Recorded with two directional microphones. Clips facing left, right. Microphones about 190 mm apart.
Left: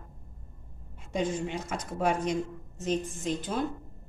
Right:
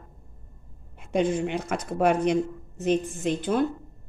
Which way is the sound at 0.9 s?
65° right (ahead or behind).